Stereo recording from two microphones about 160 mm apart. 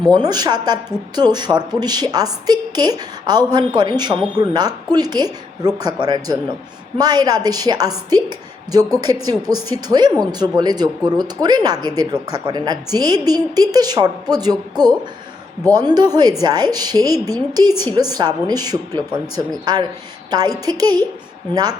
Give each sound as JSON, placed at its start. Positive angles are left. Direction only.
{"t": 0.1, "sound": "a woman's voice", "side_deg": -25}